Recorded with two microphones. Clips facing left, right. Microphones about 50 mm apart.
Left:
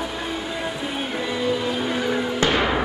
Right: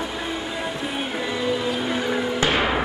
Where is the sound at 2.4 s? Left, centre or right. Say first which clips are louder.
Left 1 dB; centre.